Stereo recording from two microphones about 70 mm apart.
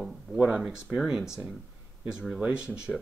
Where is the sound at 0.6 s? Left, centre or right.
Centre.